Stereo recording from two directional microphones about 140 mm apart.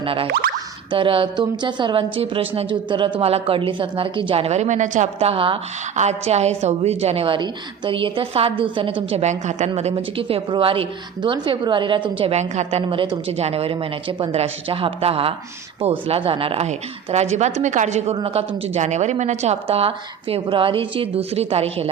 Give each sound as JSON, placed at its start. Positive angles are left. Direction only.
{"t": 0.0, "sound": "boing", "side_deg": -40}
{"t": 0.9, "sound": "a woman's voice", "side_deg": -40}
{"t": 5.3, "sound": "speech", "side_deg": -40}
{"t": 6.0, "sound": "a woman's voice", "side_deg": -50}
{"t": 12.9, "sound": "a woman's voice", "side_deg": -35}